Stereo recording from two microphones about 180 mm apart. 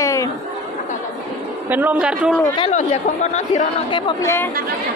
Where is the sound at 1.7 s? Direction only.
10° right (ahead or behind).